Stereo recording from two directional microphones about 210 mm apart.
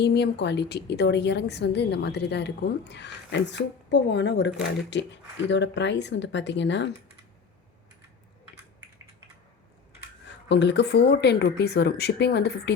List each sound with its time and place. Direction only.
0.0 s a woman's voice: 55° left (ahead or behind)
10.5 s speech: 55° left (ahead or behind)